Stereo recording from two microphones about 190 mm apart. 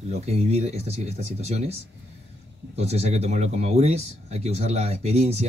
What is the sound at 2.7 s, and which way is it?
Speech, 35° right (ahead or behind).